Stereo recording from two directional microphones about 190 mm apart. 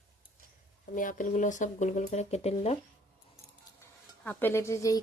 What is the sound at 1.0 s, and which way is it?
Speech, 45° left (ahead or behind).